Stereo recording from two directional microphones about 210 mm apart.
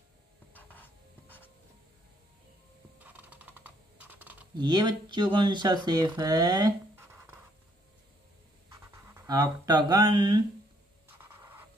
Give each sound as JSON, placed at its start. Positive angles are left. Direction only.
{"t": 0.5, "sound": "stir", "side_deg": 10}
{"t": 3.0, "sound": "typing", "side_deg": -10}
{"t": 4.6, "sound": "speech", "side_deg": -20}
{"t": 9.2, "sound": "speech", "side_deg": -20}